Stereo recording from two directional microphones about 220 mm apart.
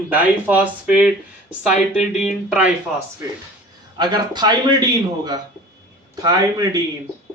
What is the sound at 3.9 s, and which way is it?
Speech, 20° right (ahead or behind).